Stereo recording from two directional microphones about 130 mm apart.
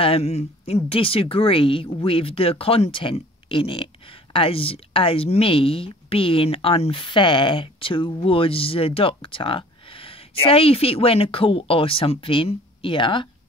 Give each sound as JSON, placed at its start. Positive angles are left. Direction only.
{"t": 0.0, "sound": "speech", "side_deg": 50}